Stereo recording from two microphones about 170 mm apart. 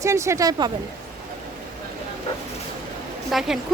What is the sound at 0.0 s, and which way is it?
Speech, 15° right (ahead or behind).